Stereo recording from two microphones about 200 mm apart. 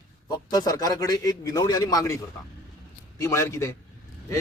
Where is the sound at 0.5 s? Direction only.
20° left (ahead or behind).